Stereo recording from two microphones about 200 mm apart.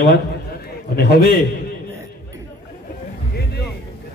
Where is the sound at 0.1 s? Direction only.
50° left (ahead or behind).